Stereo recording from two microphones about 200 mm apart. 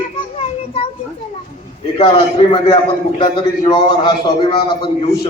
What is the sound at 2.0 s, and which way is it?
A man's voice, 25° left (ahead or behind).